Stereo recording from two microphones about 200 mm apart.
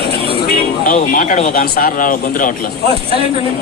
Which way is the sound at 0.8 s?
40° left (ahead or behind).